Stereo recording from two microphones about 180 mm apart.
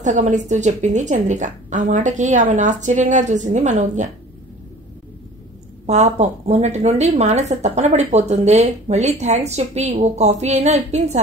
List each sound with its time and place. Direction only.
0.0 s a woman's voice: 40° right (ahead or behind)
5.9 s a woman's voice: 40° right (ahead or behind)